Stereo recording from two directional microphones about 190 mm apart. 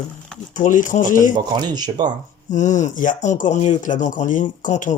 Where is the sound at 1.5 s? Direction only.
20° right (ahead or behind).